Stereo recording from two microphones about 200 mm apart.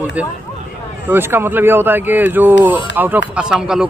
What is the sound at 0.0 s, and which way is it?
A man's voice, 5° right (ahead or behind).